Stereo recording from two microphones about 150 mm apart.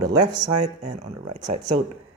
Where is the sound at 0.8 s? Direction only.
50° right (ahead or behind).